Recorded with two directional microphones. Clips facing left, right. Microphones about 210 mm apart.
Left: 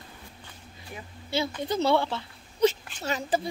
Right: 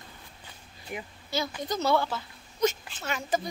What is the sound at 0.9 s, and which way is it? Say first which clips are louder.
Speech: right 5 dB; 15° right (ahead or behind).